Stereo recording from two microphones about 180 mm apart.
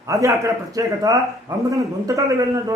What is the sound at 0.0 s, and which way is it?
A man's voice, 15° right (ahead or behind).